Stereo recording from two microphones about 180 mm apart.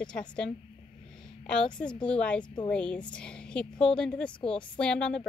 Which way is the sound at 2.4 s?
25° left (ahead or behind).